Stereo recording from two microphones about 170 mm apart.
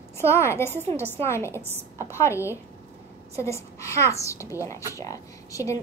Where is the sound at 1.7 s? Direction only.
15° right (ahead or behind).